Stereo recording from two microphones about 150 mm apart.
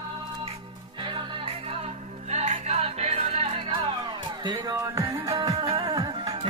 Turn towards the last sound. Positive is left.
turn(degrees=-25)  # may be behind; listen again after turning